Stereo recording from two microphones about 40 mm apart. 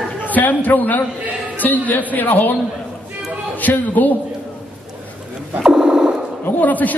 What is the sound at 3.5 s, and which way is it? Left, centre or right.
Speech, left.